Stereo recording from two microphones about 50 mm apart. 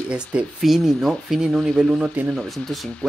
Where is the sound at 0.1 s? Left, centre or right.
Right.